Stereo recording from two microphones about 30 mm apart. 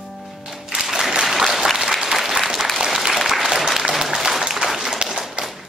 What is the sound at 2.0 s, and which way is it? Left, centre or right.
Applause, centre.